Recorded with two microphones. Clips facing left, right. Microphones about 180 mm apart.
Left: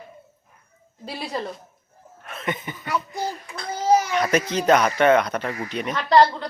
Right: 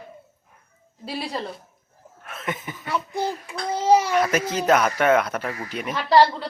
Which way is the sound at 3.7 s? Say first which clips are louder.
Right 1 dB; 30° right (ahead or behind).